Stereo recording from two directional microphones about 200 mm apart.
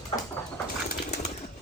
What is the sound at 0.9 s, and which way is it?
Pigeon, 35° left (ahead or behind).